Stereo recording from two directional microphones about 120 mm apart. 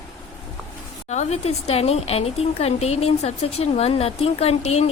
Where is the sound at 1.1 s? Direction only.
70° left (ahead or behind).